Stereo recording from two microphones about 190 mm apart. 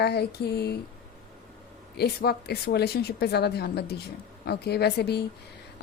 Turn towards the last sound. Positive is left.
turn(degrees=60)  # may be behind; listen again after turning